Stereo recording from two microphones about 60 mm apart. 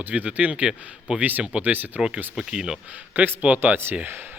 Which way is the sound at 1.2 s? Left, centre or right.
Right.